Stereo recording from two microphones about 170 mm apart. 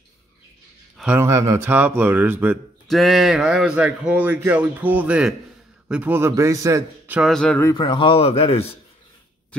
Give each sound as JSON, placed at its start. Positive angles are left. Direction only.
{"t": 0.9, "sound": "speech", "side_deg": -10}
{"t": 7.2, "sound": "speech", "side_deg": 0}
{"t": 7.7, "sound": "speech", "side_deg": 30}